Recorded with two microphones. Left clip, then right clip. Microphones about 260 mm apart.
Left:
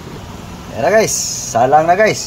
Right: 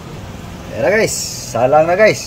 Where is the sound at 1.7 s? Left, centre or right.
Left.